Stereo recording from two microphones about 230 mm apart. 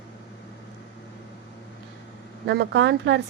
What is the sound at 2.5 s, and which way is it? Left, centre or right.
Speech, right.